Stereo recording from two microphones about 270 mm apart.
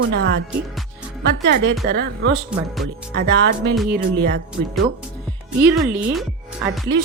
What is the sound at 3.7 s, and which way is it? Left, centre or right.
Speech, centre.